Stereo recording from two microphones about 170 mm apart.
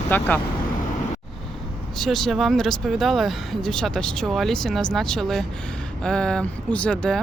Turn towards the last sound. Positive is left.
turn(degrees=5)  # may be behind; listen again after turning